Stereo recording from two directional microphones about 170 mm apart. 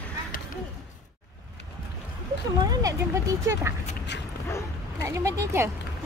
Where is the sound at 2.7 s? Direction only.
20° right (ahead or behind).